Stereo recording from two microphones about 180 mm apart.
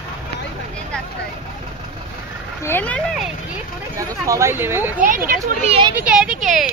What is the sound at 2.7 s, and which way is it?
Speech, 10° left (ahead or behind).